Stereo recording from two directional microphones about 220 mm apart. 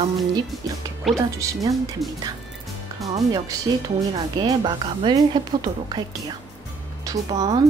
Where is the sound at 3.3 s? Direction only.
15° right (ahead or behind).